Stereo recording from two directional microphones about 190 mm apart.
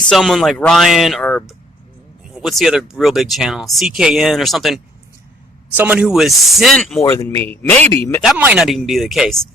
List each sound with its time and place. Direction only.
0.1 s speech: centre (ahead or behind)
7.0 s speech: 15° left (ahead or behind)
8.4 s speech: 5° right (ahead or behind)